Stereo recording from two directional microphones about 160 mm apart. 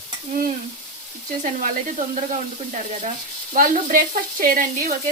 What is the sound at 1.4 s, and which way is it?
Speech, 55° right (ahead or behind).